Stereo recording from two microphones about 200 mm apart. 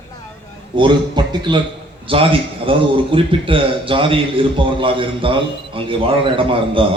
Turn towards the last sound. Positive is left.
turn(degrees=-25)  # may be behind; listen again after turning